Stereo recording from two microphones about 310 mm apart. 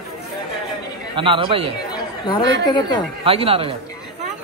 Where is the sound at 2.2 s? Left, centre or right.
Centre.